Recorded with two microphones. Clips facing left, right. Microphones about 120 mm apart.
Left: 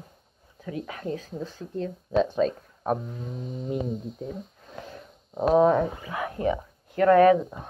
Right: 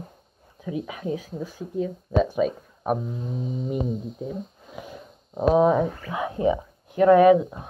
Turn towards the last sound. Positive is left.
turn(degrees=-15)  # may be behind; listen again after turning